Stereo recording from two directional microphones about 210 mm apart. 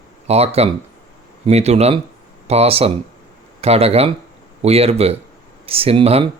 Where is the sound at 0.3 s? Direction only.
30° right (ahead or behind).